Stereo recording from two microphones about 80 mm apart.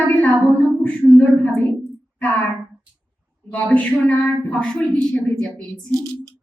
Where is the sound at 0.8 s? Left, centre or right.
Centre.